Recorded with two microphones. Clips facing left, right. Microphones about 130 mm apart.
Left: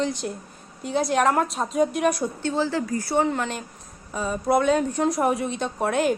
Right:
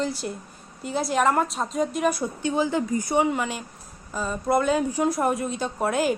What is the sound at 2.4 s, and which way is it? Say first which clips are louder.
A woman's voice: right 3 dB; 15° right (ahead or behind).